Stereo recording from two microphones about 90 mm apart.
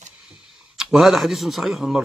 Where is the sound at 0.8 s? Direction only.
5° right (ahead or behind).